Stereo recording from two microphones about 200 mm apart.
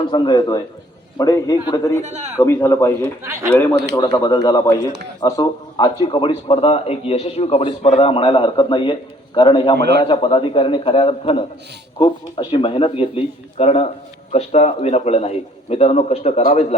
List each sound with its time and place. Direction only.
0.1 s a man's voice: 20° left (ahead or behind)
2.0 s a man's voice: 35° right (ahead or behind)
2.4 s a man's voice: 15° left (ahead or behind)
9.7 s a man's voice: 55° right (ahead or behind)
10.0 s a man's voice: 25° left (ahead or behind)